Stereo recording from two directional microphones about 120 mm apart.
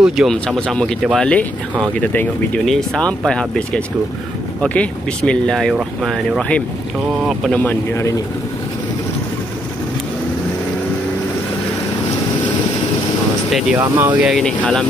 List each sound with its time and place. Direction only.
0.0 s speech: 5° right (ahead or behind)
7.6 s a man's voice: 20° left (ahead or behind)
13.5 s speech: centre (ahead or behind)
13.7 s speech: 15° right (ahead or behind)
14.3 s speech: 5° left (ahead or behind)